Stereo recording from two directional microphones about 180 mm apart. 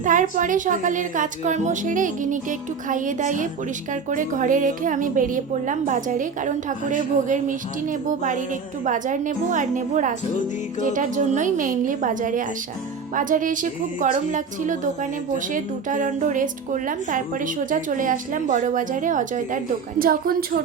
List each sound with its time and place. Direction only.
0.0 s a woman's voice: 45° right (ahead or behind)